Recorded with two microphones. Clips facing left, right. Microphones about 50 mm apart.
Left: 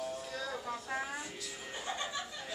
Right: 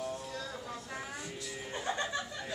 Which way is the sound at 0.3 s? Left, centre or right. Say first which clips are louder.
Left 2 dB; left.